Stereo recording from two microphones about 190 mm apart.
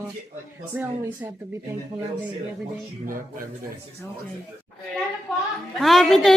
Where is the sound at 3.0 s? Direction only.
45° right (ahead or behind).